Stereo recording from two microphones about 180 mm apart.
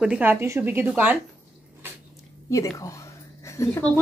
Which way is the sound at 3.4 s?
15° left (ahead or behind).